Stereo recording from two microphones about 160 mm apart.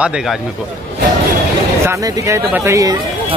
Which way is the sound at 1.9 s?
20° right (ahead or behind).